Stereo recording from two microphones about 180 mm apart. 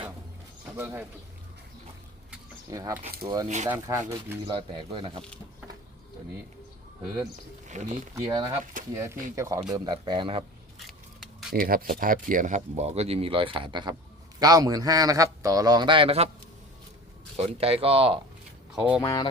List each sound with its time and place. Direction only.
0.8 s speech: 15° right (ahead or behind)
2.6 s a man's voice: 20° right (ahead or behind)
3.2 s a man's voice: 30° right (ahead or behind)
3.7 s a man's voice: 15° right (ahead or behind)
7.7 s speech: 40° right (ahead or behind)
8.1 s a man's voice: 20° right (ahead or behind)
10.8 s a sound: centre (ahead or behind)
11.5 s a man's voice: 50° right (ahead or behind); by 16.3 s 35° right (ahead or behind)
17.3 s speech: 35° right (ahead or behind)
18.7 s speech: 5° right (ahead or behind)
19.0 s speech: 20° left (ahead or behind)